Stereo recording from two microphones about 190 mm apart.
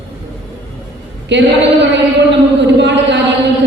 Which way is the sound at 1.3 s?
70° right (ahead or behind).